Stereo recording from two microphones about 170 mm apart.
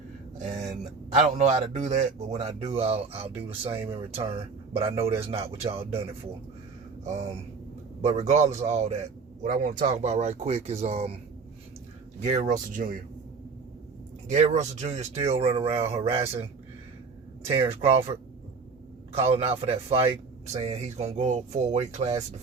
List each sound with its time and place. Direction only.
0.3 s a sound: 40° right (ahead or behind)
1.1 s speech: 40° right (ahead or behind)
12.2 s speech: 45° right (ahead or behind)
14.3 s speech: 45° right (ahead or behind)
17.5 s speech: 35° right (ahead or behind)
19.1 s speech: 35° right (ahead or behind)